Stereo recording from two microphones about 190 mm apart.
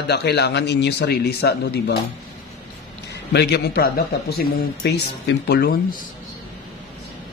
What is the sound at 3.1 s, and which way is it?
A man's voice, 60° left (ahead or behind).